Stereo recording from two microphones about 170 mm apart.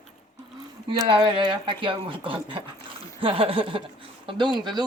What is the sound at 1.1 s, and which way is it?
Speech, 30° right (ahead or behind).